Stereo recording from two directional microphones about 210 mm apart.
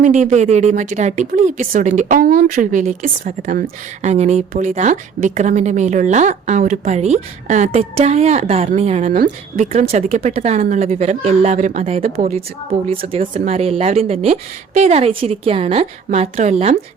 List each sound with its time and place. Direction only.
0.0 s a woman's voice: 35° right (ahead or behind)